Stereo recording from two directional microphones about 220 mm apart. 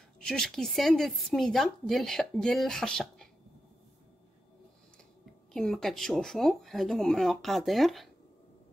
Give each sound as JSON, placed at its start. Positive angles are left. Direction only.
{"t": 0.2, "sound": "a woman's voice", "side_deg": 0}
{"t": 5.5, "sound": "a woman's voice", "side_deg": 0}